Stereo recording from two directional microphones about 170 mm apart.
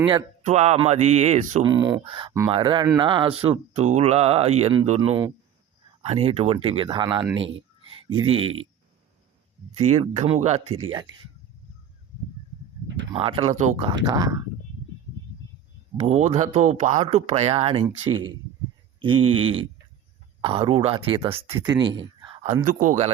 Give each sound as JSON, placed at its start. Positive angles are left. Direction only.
{"t": 0.4, "sound": "speech", "side_deg": -40}
{"t": 1.6, "sound": "speech", "side_deg": -25}
{"t": 4.9, "sound": "speech", "side_deg": -25}
{"t": 6.0, "sound": "speech", "side_deg": -40}
{"t": 9.7, "sound": "speech", "side_deg": -40}
{"t": 13.1, "sound": "speech", "side_deg": -35}
{"t": 14.0, "sound": "speech", "side_deg": -20}
{"t": 16.0, "sound": "speech", "side_deg": -40}
{"t": 22.6, "sound": "speech", "side_deg": -45}